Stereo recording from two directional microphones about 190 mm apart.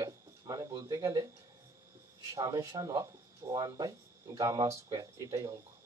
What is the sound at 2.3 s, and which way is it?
Speech, 15° right (ahead or behind).